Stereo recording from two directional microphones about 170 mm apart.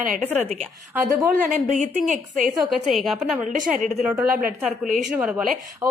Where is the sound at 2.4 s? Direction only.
Centre (ahead or behind).